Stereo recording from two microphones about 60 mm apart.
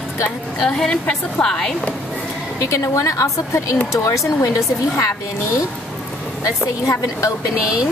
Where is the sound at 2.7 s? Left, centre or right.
Left.